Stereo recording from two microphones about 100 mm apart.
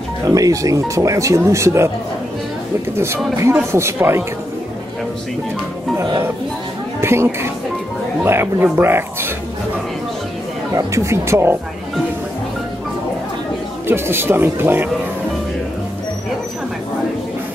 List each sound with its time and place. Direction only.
0.3 s speech: 35° right (ahead or behind)
3.7 s speech: 25° right (ahead or behind)
7.0 s speech: 25° right (ahead or behind)
10.7 s speech: 30° right (ahead or behind)
13.8 s speech: 25° right (ahead or behind)